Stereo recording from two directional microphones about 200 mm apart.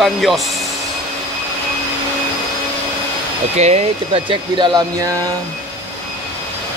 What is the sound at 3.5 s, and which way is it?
Speech, 35° right (ahead or behind).